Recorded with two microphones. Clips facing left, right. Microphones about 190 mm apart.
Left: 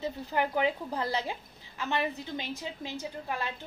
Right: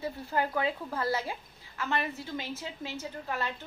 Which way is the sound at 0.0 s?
20° left (ahead or behind).